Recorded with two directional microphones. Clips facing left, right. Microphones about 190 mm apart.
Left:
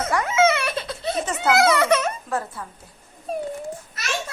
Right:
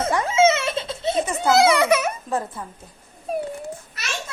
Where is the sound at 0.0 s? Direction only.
25° right (ahead or behind).